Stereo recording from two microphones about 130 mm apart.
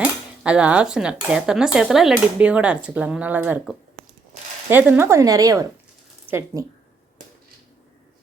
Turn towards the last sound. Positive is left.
turn(degrees=-20)  # may be behind; listen again after turning